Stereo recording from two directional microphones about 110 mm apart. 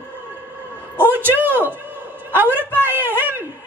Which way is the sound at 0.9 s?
20° right (ahead or behind).